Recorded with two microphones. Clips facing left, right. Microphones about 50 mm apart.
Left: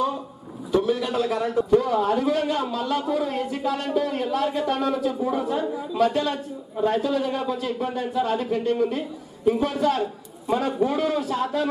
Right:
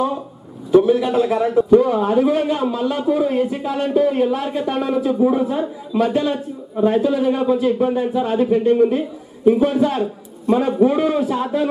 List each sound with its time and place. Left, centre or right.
0.7 s a man's voice: centre